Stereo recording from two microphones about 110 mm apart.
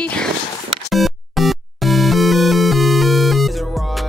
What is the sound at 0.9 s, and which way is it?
Music, centre (ahead or behind).